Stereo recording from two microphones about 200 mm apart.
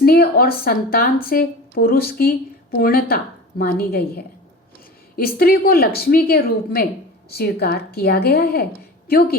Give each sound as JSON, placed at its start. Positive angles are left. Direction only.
{"t": 0.0, "sound": "speech", "side_deg": 50}